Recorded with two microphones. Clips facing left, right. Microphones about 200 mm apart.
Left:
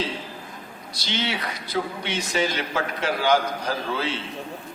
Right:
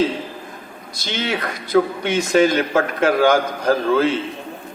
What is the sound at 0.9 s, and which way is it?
A man's voice, 50° right (ahead or behind).